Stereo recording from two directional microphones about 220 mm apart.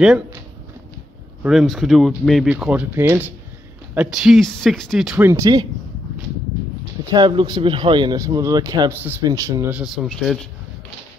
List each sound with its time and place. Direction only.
0.0 s speech: 5° right (ahead or behind)
1.4 s speech: centre (ahead or behind)
7.1 s speech: 20° right (ahead or behind)
10.0 s speech: centre (ahead or behind)